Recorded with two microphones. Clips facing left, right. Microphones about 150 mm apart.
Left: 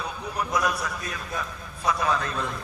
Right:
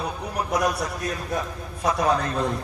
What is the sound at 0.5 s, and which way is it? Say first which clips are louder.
Speech: right 3 dB; 35° right (ahead or behind).